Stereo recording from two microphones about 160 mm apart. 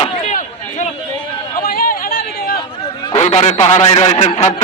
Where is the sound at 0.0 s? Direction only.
50° left (ahead or behind).